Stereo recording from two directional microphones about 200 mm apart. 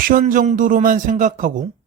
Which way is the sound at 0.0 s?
45° right (ahead or behind).